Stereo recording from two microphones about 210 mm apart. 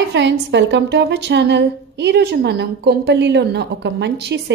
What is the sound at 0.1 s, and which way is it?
A woman's voice, 55° right (ahead or behind).